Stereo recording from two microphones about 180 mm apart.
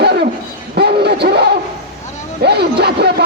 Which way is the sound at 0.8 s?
65° right (ahead or behind).